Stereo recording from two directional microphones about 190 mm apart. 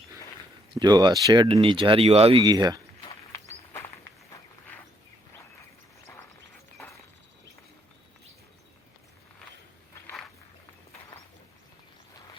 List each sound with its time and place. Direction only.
0.7 s speech: 20° right (ahead or behind)
3.7 s walk: 15° left (ahead or behind)